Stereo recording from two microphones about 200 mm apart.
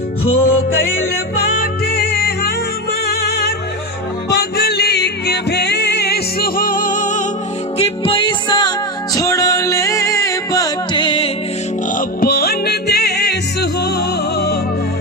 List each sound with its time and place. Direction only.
0.3 s music: 90° left
1.4 s music: 50° left (ahead or behind)
7.8 s music: 25° left (ahead or behind)
11.9 s music: 50° left (ahead or behind)